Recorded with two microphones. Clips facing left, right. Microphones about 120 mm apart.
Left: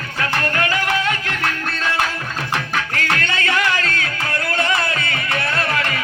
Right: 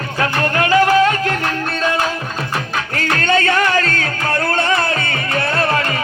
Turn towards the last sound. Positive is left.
turn(degrees=-35)  # may be behind; listen again after turning